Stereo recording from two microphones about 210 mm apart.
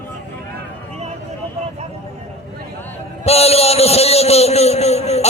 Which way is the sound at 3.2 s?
30° left (ahead or behind).